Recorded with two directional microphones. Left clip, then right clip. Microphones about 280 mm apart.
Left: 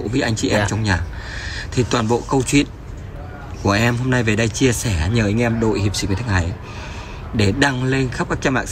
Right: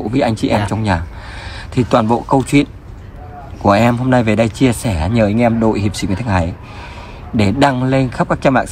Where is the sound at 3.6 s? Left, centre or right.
Centre.